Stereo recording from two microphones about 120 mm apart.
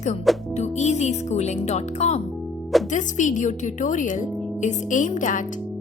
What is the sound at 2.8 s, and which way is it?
Speech, 90° left.